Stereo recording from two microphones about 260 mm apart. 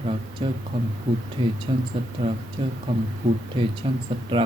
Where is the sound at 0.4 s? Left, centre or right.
Centre.